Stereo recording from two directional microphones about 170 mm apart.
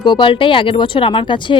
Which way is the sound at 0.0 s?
30° left (ahead or behind).